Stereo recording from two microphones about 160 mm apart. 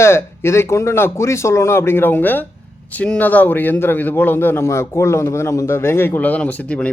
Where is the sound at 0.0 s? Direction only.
15° left (ahead or behind).